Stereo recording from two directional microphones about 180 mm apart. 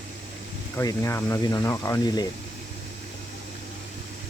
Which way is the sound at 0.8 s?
15° left (ahead or behind).